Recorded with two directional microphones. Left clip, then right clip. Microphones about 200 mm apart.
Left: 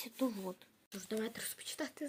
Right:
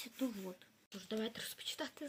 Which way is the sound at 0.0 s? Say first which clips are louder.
Left 4 dB; 15° left (ahead or behind).